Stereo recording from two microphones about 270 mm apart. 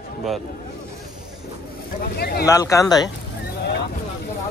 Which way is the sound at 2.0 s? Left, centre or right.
Left.